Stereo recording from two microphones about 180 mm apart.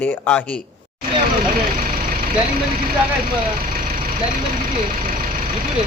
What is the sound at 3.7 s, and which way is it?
Vehicle, 55° right (ahead or behind).